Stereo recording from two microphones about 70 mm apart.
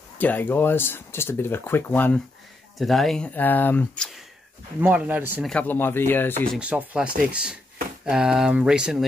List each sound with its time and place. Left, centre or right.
0.2 s speech: left
2.8 s speech: centre
3.3 s speech: left
4.7 s speech: right
5.7 s speech: left
6.6 s speech: right